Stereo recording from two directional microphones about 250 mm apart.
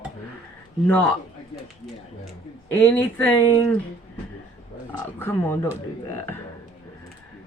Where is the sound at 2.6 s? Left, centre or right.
Centre.